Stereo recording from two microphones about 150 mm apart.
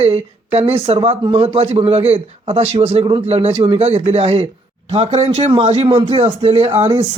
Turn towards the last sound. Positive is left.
turn(degrees=-40)  # may be behind; listen again after turning